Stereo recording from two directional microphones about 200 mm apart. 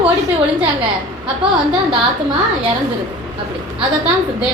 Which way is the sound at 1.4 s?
5° right (ahead or behind).